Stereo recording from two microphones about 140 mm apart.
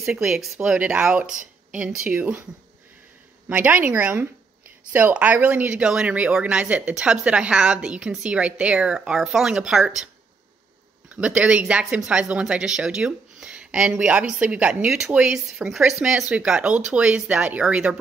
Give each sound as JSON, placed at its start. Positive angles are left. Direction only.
{"t": 0.0, "sound": "a woman's voice", "side_deg": -5}
{"t": 1.3, "sound": "a sound", "side_deg": -70}
{"t": 1.8, "sound": "speech", "side_deg": -10}
{"t": 3.4, "sound": "a woman's voice", "side_deg": -10}
{"t": 11.1, "sound": "speech", "side_deg": -10}